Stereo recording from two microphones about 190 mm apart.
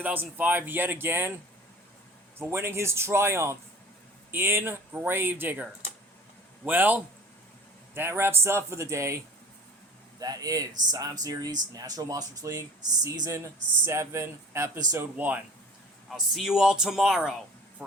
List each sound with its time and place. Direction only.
0.0 s speech: 10° right (ahead or behind)
2.4 s speech: 15° right (ahead or behind)
6.7 s speech: 10° right (ahead or behind)
10.2 s speech: 20° right (ahead or behind); by 17.8 s 5° right (ahead or behind)